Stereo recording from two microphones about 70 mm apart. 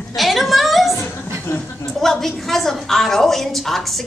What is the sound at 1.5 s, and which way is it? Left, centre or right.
Speech, left.